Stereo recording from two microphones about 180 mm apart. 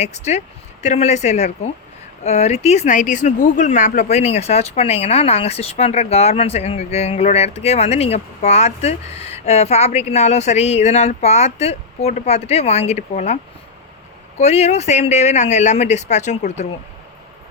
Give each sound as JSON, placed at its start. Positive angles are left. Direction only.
{"t": 0.0, "sound": "speech", "side_deg": 40}